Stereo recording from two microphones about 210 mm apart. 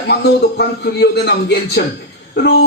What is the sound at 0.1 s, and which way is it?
A man's voice, 50° left (ahead or behind).